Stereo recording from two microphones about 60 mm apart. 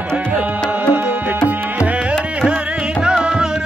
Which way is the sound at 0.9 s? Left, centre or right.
Right.